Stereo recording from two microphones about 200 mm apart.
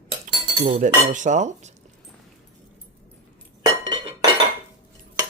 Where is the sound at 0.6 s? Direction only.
35° right (ahead or behind).